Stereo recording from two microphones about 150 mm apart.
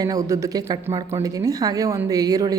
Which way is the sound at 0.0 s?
25° right (ahead or behind).